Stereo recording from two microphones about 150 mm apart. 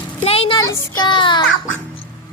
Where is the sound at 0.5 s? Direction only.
30° left (ahead or behind).